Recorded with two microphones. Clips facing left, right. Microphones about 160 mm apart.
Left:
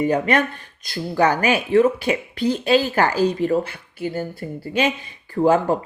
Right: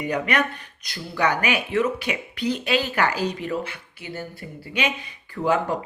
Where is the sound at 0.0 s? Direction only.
30° left (ahead or behind).